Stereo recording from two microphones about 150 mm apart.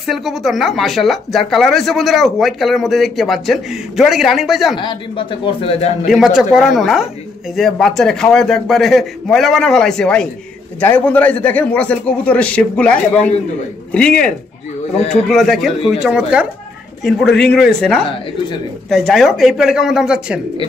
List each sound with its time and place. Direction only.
0.0 s speech: centre (ahead or behind)
4.7 s speech: 35° left (ahead or behind)
6.0 s speech: centre (ahead or behind)